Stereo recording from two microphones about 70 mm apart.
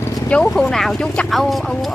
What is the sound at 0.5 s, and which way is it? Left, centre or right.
Speech, centre.